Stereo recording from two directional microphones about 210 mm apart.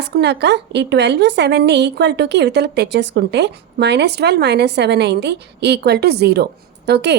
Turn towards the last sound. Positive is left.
turn(degrees=-50)  # may be behind; listen again after turning